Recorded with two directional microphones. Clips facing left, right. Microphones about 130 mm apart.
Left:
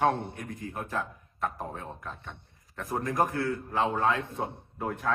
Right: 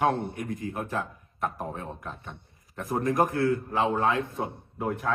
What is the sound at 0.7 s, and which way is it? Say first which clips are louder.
Speech: right 2 dB; 25° right (ahead or behind).